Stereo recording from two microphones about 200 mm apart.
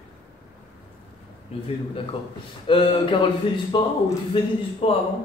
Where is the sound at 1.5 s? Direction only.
30° left (ahead or behind).